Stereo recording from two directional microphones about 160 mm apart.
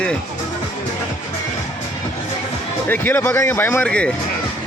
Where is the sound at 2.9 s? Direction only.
10° left (ahead or behind).